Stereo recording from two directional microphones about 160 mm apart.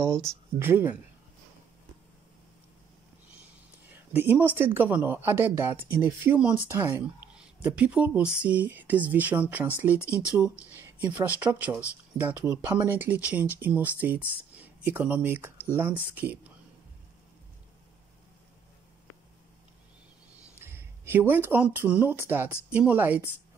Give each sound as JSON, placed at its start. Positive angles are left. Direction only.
{"t": 0.0, "sound": "speech", "side_deg": -15}
{"t": 3.9, "sound": "speech", "side_deg": -10}
{"t": 20.5, "sound": "speech", "side_deg": -15}